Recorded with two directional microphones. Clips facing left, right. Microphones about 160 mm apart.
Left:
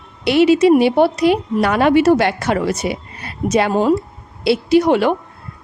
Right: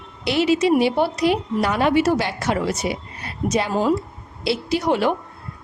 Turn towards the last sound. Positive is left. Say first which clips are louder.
# left 7 dB
turn(degrees=65)  # may be behind; listen again after turning